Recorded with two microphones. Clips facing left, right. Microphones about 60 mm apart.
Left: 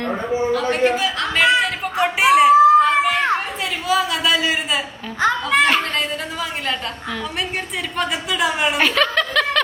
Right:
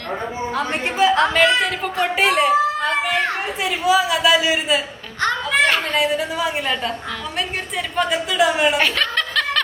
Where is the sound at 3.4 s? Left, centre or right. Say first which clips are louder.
Right 2 dB; centre.